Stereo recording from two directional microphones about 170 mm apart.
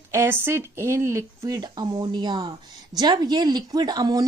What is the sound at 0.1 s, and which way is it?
Speech, 15° right (ahead or behind).